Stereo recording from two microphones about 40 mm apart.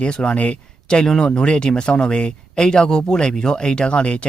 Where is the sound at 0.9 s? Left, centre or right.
Centre.